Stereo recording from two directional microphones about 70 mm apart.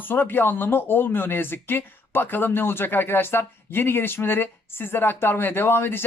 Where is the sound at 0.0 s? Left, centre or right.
Left.